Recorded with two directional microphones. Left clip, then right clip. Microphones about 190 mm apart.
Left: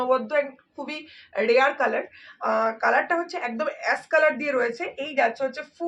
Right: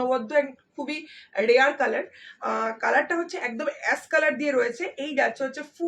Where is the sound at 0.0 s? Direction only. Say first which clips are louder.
Left 1 dB; 20° right (ahead or behind).